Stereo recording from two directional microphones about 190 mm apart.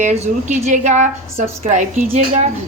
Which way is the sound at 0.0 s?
40° right (ahead or behind).